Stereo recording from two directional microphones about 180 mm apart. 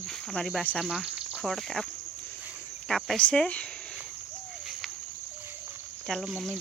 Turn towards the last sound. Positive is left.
turn(degrees=0)  # may be behind; listen again after turning